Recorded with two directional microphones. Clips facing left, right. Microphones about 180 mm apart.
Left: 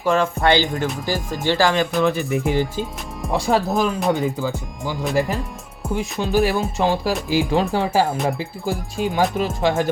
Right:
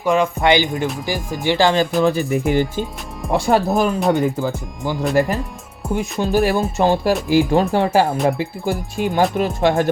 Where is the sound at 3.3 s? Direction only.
60° right (ahead or behind).